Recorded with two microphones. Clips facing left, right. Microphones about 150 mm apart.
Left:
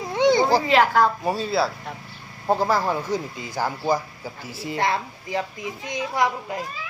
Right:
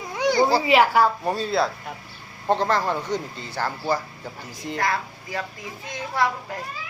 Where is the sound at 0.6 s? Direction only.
10° right (ahead or behind).